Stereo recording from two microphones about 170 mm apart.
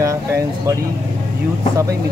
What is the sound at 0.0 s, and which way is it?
Speech, 15° right (ahead or behind).